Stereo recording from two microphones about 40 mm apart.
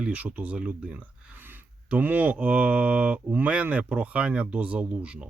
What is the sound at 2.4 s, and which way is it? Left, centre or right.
Speech, right.